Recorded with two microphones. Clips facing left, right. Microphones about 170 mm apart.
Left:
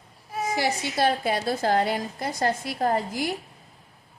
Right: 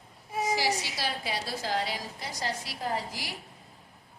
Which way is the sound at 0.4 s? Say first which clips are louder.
Left 3 dB; 55° left (ahead or behind).